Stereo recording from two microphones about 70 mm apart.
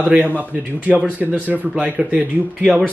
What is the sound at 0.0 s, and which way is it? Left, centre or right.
Speech, centre.